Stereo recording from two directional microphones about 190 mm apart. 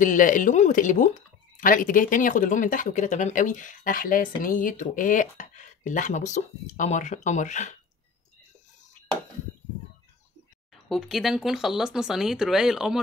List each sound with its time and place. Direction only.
0.0 s speech: 45° left (ahead or behind)
10.9 s speech: centre (ahead or behind)